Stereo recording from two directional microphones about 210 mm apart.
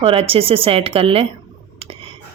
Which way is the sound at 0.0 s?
25° right (ahead or behind).